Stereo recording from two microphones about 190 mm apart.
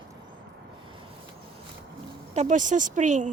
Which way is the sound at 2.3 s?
40° right (ahead or behind).